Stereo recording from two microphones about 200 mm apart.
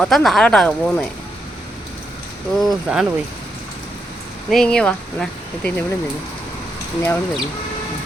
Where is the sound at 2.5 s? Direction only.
Centre (ahead or behind).